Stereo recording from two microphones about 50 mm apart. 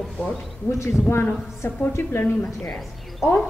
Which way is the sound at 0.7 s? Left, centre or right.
Left.